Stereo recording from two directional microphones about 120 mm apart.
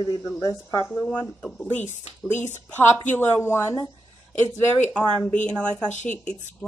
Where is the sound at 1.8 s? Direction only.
80° left.